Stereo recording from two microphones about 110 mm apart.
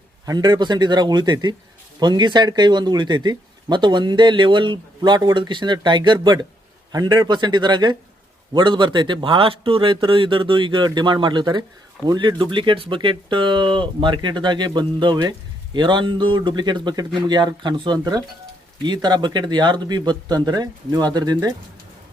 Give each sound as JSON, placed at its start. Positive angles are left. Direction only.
{"t": 0.3, "sound": "speech", "side_deg": -40}